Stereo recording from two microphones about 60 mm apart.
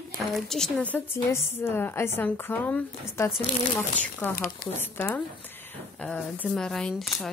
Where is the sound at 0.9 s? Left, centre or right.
Left.